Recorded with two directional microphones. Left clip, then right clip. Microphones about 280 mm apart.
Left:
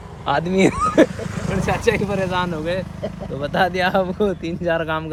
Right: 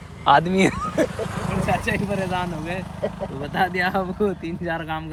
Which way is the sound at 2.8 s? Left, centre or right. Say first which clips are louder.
Right 2 dB; right.